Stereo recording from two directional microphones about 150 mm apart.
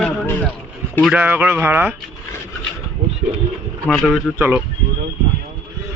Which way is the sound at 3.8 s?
Centre (ahead or behind).